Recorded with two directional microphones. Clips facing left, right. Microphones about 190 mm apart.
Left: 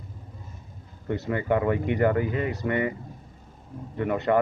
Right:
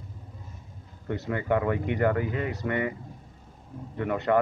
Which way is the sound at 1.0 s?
25° left (ahead or behind).